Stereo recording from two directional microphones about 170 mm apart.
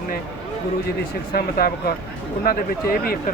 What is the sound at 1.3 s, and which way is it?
Speech, 60° left (ahead or behind).